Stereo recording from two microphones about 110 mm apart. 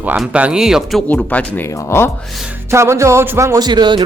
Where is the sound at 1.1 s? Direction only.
15° left (ahead or behind).